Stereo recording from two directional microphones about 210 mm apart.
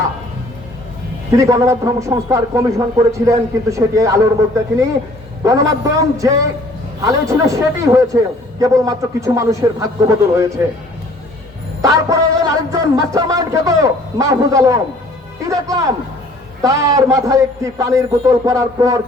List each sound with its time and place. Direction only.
1.3 s music: 15° right (ahead or behind)
5.4 s music: 15° right (ahead or behind)
11.8 s music: 15° right (ahead or behind)